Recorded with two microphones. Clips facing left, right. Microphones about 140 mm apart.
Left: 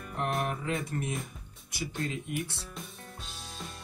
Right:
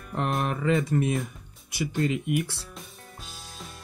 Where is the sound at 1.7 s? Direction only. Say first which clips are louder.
Right 8 dB; 80° right.